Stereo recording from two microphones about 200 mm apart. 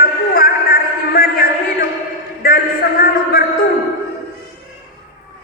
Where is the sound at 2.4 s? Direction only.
50° left (ahead or behind).